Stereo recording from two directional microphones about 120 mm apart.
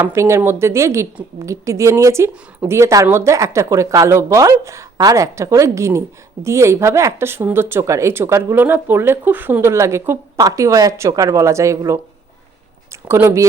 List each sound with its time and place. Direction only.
0.0 s speech: 25° right (ahead or behind)
13.1 s speech: 20° right (ahead or behind)